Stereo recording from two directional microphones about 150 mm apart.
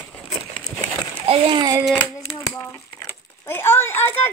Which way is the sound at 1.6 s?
20° right (ahead or behind).